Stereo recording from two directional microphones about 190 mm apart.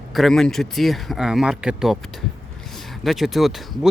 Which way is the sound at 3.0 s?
Centre (ahead or behind).